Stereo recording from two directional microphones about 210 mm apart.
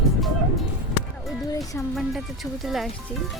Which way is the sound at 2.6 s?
Centre (ahead or behind).